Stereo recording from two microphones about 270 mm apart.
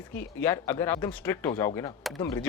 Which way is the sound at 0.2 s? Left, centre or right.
Centre.